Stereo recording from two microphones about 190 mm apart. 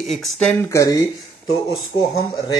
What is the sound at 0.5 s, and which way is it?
Speech, 15° left (ahead or behind).